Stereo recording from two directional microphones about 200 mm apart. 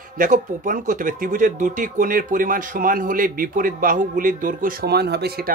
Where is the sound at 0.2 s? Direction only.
40° right (ahead or behind).